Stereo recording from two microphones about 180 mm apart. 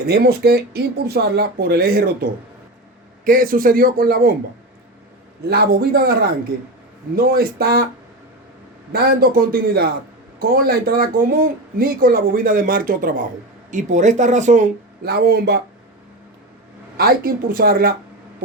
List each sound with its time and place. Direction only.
0.1 s speech: 60° right (ahead or behind)
3.2 s a man's voice: 50° right (ahead or behind)
5.5 s speech: 60° right (ahead or behind)
8.9 s a man's voice: 60° right (ahead or behind); by 14.7 s 40° right (ahead or behind)
15.0 s speech: 60° right (ahead or behind)
17.0 s speech: 55° right (ahead or behind)